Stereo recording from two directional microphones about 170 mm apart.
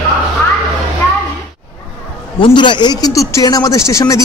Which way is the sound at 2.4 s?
25° left (ahead or behind).